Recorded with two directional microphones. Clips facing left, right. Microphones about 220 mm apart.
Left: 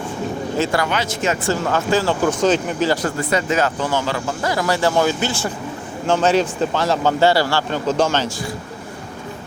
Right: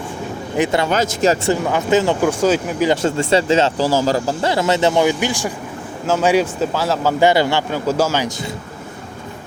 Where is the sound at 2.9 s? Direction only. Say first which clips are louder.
Right 4 dB; 25° right (ahead or behind).